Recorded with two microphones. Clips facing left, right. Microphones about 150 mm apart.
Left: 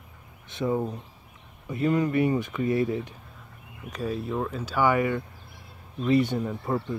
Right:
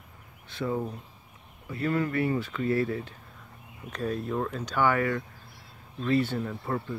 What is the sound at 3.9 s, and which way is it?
Speech, 5° left (ahead or behind).